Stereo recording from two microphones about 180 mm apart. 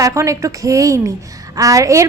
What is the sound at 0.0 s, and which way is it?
A woman's voice, 15° right (ahead or behind).